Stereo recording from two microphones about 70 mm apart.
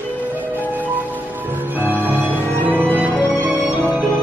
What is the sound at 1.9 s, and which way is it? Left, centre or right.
Music, right.